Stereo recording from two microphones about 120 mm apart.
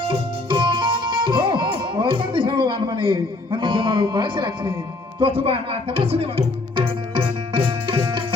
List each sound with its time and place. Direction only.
0.1 s music: 45° right (ahead or behind)
5.2 s speech: 50° right (ahead or behind)
7.1 s tabla: 40° right (ahead or behind)